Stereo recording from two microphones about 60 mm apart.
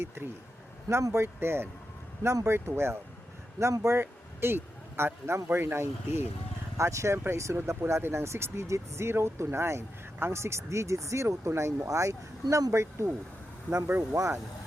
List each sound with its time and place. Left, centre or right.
1.1 s speech: right
6.7 s speech: right
13.7 s speech: right
14.1 s speech: right